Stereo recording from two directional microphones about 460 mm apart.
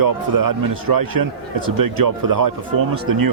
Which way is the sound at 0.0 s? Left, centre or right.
Right.